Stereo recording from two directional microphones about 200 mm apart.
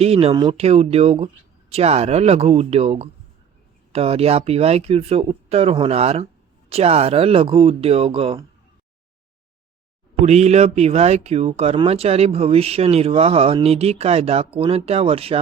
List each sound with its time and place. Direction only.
0.0 s speech: 30° right (ahead or behind)
10.2 s speech: 35° right (ahead or behind)